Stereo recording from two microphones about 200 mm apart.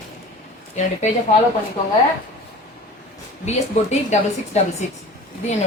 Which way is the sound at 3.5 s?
35° left (ahead or behind).